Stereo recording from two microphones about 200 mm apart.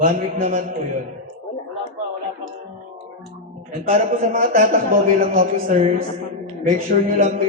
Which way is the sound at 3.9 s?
40° right (ahead or behind).